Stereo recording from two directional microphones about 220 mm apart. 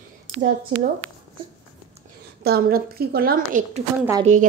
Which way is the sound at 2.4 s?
45° right (ahead or behind).